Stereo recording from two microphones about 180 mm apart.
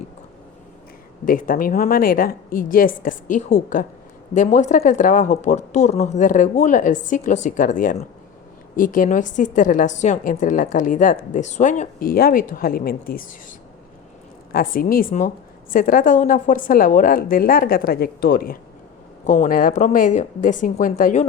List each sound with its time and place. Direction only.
1.2 s a woman's voice: 50° left (ahead or behind)
14.5 s a woman's voice: 55° left (ahead or behind)